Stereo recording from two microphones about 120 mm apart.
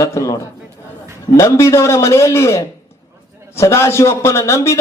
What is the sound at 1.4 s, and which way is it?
A man's voice, 25° left (ahead or behind).